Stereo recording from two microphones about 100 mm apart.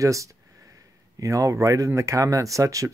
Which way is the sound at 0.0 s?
30° right (ahead or behind).